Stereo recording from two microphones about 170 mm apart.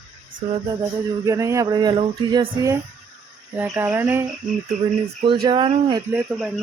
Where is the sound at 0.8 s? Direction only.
20° right (ahead or behind).